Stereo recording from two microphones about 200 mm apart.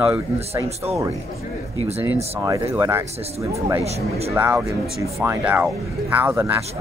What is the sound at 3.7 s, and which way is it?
Speech, 30° right (ahead or behind).